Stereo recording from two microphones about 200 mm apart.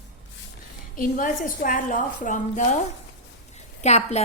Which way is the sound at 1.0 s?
45° left (ahead or behind).